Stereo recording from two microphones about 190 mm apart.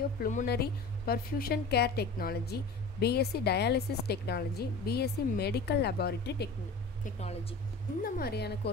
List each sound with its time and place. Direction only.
0.2 s speech: 40° left (ahead or behind)
0.5 s a woman's voice: 55° left (ahead or behind)
8.0 s a woman's voice: 55° left (ahead or behind)